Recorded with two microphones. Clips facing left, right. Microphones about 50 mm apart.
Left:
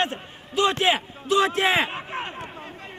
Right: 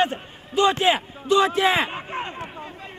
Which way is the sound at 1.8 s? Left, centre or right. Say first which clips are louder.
Right 1 dB; centre.